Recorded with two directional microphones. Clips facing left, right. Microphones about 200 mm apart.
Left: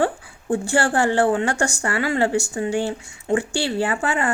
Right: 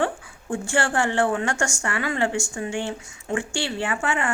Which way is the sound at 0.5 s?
35° left (ahead or behind).